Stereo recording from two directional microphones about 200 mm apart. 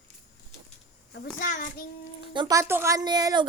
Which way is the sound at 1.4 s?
40° left (ahead or behind).